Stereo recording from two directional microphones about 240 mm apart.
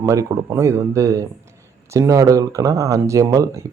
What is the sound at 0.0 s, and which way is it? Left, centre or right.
Speech, centre.